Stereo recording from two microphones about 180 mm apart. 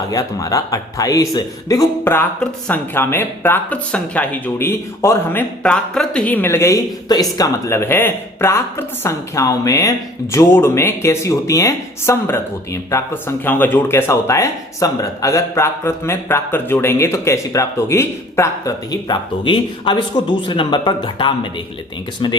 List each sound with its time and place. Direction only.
0.1 s speech: 20° left (ahead or behind)